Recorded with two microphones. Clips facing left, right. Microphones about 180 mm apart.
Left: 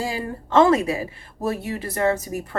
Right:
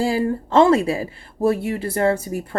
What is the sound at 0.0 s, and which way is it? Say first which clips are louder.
A woman's voice: right 8 dB; 30° right (ahead or behind).